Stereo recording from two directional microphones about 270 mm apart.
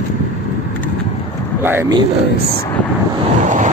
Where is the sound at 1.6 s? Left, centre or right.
Centre.